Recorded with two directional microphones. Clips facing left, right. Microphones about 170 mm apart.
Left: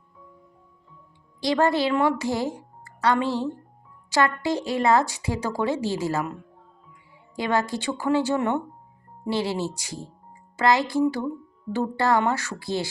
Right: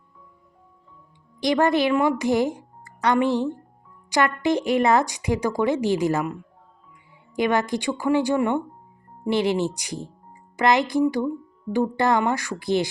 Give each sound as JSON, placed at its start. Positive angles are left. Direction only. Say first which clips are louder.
{"t": 1.4, "sound": "a woman's voice", "louder": "right 2 dB", "side_deg": -20}
{"t": 7.3, "sound": "a woman's voice", "louder": "right 3 dB", "side_deg": -20}